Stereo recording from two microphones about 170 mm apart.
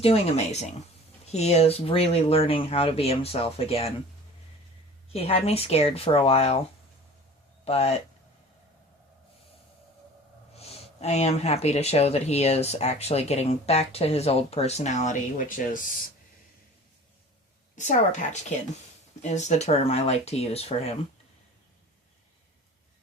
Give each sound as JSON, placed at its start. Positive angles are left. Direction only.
{"t": 0.0, "sound": "speech", "side_deg": 40}
{"t": 5.0, "sound": "speech", "side_deg": 35}
{"t": 7.6, "sound": "speech", "side_deg": 35}
{"t": 10.5, "sound": "speech", "side_deg": 35}
{"t": 17.7, "sound": "a woman's voice", "side_deg": 45}